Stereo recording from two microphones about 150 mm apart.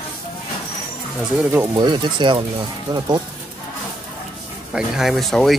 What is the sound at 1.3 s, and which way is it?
Speech, 15° right (ahead or behind).